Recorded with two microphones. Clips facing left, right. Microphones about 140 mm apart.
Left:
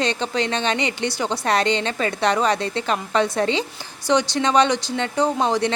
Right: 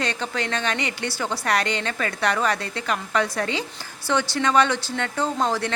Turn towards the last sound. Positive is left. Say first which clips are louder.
# left 4 dB
turn(degrees=20)  # may be behind; listen again after turning